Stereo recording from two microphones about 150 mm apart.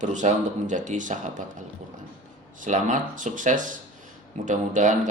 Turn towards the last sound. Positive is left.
turn(degrees=-55)  # may be behind; listen again after turning